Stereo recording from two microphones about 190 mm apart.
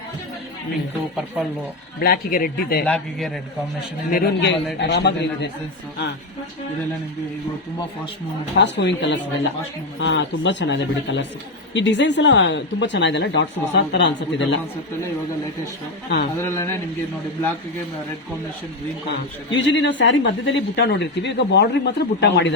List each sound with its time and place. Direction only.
2.0 s a man's voice: 50° left (ahead or behind)
2.8 s a man's voice: 5° left (ahead or behind)
4.1 s a man's voice: 60° left (ahead or behind)
8.5 s speech: 65° left (ahead or behind)
16.4 s a man's voice: 15° left (ahead or behind)
19.5 s speech: 75° left (ahead or behind)